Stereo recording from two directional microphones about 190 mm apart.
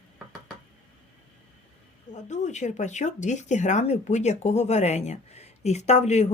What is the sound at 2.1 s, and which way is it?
Speech, 40° left (ahead or behind).